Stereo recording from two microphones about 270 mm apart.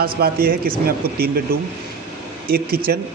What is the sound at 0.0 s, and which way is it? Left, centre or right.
Speech, right.